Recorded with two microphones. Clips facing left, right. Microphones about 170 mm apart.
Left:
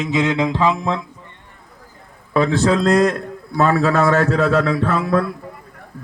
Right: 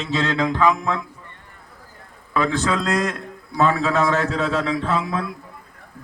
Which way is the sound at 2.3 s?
30° left (ahead or behind).